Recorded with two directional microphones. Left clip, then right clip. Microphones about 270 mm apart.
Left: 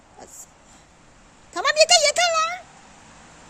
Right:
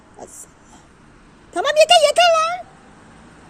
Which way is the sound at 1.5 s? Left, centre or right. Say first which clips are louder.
Right 4 dB; centre.